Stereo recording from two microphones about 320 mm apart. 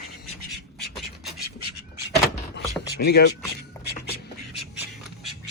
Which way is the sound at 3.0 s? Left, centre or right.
Left.